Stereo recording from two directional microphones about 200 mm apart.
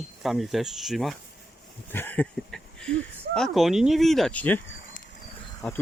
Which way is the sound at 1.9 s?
10° left (ahead or behind).